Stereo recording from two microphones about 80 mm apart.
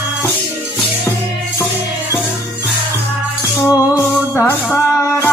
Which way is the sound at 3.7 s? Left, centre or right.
Left.